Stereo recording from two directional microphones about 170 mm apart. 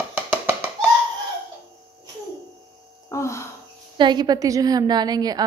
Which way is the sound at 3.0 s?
15° left (ahead or behind).